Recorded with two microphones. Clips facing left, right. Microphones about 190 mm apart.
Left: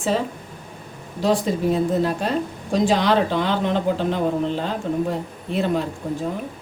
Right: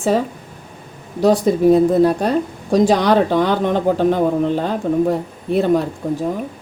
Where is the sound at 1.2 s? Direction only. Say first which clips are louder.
Right 7 dB; 40° right (ahead or behind).